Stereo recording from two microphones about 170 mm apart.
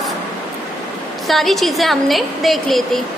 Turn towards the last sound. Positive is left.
turn(degrees=0)  # may be behind; listen again after turning